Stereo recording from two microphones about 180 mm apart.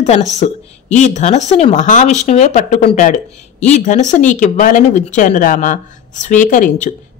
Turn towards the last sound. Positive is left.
turn(degrees=45)  # may be behind; listen again after turning